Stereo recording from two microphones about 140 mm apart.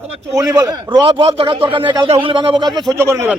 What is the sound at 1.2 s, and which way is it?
A man's voice, 40° right (ahead or behind).